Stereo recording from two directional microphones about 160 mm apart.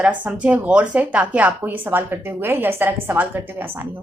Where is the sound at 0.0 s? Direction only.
10° right (ahead or behind).